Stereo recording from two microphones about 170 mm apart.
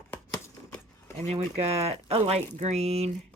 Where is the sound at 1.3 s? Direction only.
40° right (ahead or behind).